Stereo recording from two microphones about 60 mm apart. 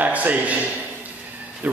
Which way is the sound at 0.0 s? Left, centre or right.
Right.